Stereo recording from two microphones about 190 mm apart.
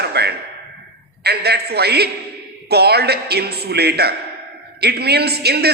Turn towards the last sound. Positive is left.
turn(degrees=-60)  # may be behind; listen again after turning